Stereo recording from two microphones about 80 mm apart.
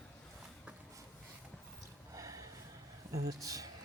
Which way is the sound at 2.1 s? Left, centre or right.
Right.